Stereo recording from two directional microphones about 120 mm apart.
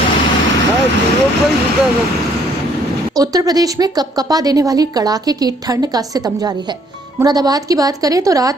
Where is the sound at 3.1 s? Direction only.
30° right (ahead or behind).